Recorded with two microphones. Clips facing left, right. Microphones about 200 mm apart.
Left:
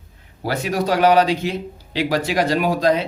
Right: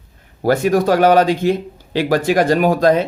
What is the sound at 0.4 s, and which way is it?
Speech, 50° right (ahead or behind).